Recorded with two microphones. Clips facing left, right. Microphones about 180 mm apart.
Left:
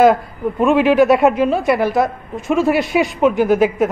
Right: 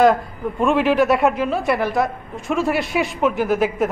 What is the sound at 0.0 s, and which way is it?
A man's voice, centre (ahead or behind).